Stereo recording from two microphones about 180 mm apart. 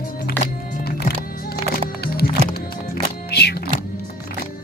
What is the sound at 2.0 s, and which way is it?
Music, 55° left (ahead or behind).